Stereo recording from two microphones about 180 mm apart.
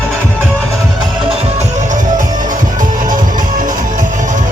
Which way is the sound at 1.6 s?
40° right (ahead or behind).